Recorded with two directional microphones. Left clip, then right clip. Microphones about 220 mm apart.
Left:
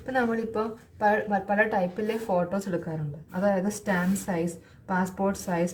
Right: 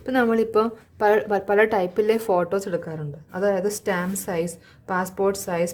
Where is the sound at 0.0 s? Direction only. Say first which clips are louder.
Right 6 dB; 50° right (ahead or behind).